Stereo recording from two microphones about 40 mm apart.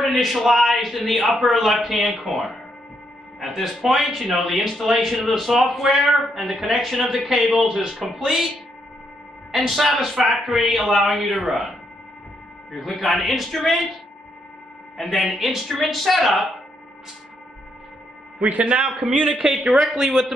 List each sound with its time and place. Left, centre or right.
0.0 s a man's voice: centre
9.5 s a man's voice: centre
12.7 s a man's voice: centre
15.0 s a man's voice: centre
18.5 s a man's voice: right
19.2 s speech: right
19.7 s a man's voice: centre